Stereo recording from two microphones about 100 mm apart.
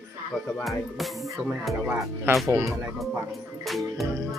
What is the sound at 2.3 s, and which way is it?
Speech, 25° right (ahead or behind).